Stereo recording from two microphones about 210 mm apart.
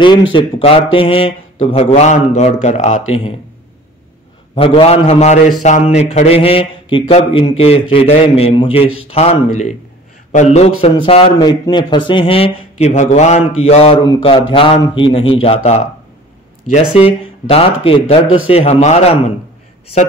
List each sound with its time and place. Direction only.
0.3 s speech: 25° left (ahead or behind)
4.6 s speech: 25° left (ahead or behind)
5.6 s mantra: 35° left (ahead or behind)
5.9 s speech: 30° left (ahead or behind)
9.1 s mantra: 30° left (ahead or behind)
11.1 s speech: 25° left (ahead or behind)
12.1 s mantra: 25° left (ahead or behind)
13.6 s speech: 30° left (ahead or behind)
16.9 s speech: 25° left (ahead or behind)
18.5 s mantra: 30° left (ahead or behind)